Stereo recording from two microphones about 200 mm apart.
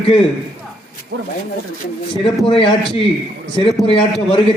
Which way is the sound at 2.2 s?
25° left (ahead or behind).